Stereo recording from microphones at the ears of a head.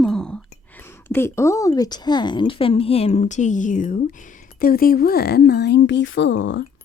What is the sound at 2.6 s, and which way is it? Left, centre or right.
Speech, left.